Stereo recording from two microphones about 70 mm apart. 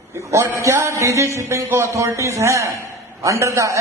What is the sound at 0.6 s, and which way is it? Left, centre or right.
A man's voice, right.